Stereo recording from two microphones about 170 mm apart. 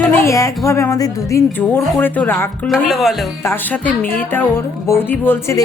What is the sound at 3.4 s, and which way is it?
A woman's voice, 10° left (ahead or behind).